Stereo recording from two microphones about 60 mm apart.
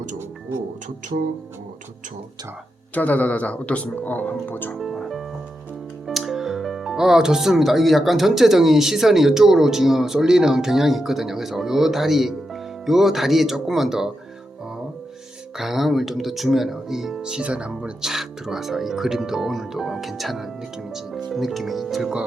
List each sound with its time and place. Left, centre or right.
2.9 s speech: left
4.7 s music: centre
6.1 s speech: centre
15.5 s speech: centre